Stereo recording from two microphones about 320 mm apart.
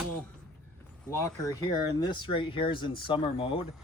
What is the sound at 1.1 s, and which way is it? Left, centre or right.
Speech, centre.